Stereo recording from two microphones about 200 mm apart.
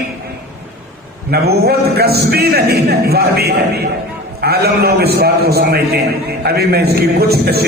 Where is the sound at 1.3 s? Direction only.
50° right (ahead or behind).